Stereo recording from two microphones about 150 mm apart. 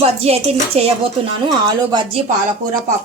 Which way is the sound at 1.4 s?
30° right (ahead or behind).